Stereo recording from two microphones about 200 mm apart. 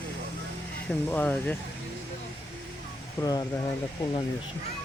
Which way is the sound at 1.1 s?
10° left (ahead or behind).